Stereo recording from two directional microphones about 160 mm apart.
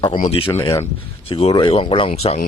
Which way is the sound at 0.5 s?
20° left (ahead or behind).